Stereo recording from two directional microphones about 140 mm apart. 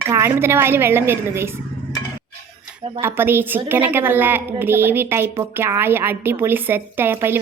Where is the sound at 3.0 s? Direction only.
15° right (ahead or behind).